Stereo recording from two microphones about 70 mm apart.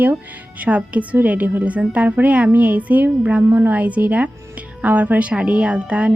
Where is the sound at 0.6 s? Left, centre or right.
Centre.